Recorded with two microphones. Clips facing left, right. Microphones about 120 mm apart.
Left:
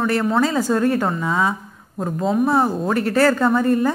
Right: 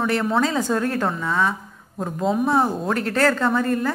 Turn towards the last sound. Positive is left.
turn(degrees=5)  # may be behind; listen again after turning